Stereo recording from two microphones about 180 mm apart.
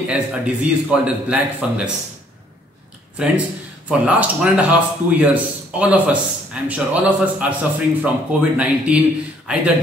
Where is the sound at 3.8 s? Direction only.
5° right (ahead or behind).